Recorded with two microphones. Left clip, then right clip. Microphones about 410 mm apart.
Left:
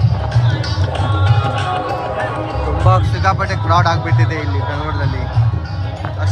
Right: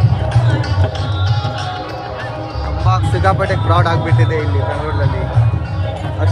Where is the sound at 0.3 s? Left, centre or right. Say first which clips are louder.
Right 4 dB; centre.